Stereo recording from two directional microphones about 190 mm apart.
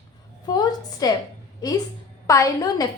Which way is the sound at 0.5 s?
20° left (ahead or behind).